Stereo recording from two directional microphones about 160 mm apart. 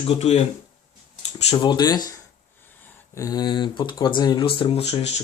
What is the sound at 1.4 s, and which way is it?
Speech, 30° left (ahead or behind).